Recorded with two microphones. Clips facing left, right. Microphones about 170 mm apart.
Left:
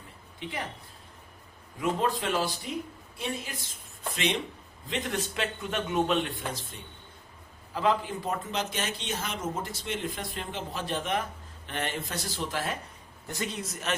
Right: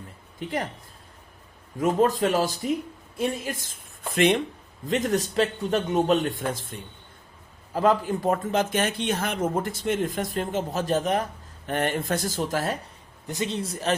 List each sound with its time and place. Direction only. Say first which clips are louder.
0.3 s speech: right 7 dB; 45° right (ahead or behind)
1.8 s a woman's voice: right 7 dB; 45° right (ahead or behind)
13.2 s a man's voice: right 6 dB; 20° right (ahead or behind)